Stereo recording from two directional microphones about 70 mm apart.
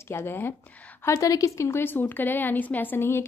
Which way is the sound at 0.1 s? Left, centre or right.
Left.